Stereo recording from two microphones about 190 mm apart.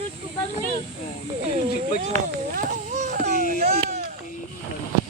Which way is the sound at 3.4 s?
45° right (ahead or behind).